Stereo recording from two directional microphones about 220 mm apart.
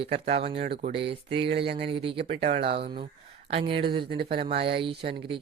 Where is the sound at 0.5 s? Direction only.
50° right (ahead or behind).